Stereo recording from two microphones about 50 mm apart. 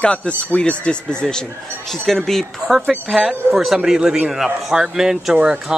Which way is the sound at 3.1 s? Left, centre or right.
Centre.